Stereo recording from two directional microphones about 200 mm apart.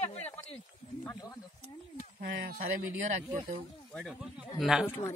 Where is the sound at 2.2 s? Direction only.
50° right (ahead or behind).